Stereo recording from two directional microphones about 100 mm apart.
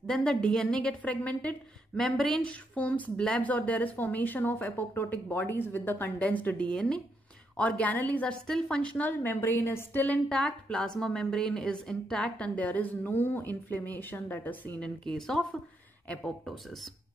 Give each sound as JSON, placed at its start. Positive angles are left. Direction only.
{"t": 0.0, "sound": "a woman's voice", "side_deg": 10}
{"t": 15.0, "sound": "speech", "side_deg": 5}